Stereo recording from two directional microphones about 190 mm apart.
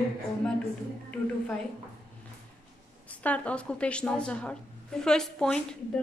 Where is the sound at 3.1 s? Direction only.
5° left (ahead or behind).